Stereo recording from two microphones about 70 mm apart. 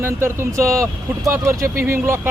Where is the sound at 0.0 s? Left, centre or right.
Right.